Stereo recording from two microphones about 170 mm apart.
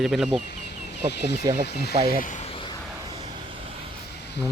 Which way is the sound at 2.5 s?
30° left (ahead or behind).